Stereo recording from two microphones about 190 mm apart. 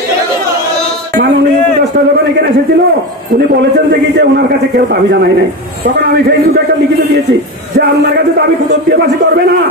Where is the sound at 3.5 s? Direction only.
60° right (ahead or behind).